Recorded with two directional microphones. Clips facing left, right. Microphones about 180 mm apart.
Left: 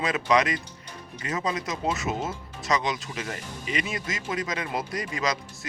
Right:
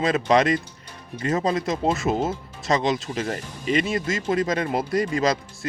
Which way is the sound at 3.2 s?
40° right (ahead or behind).